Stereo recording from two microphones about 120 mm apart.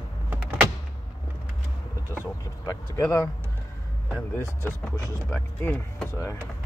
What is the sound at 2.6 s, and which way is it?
Speech, 30° left (ahead or behind).